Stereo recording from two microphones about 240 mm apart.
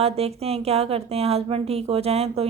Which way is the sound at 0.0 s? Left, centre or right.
Right.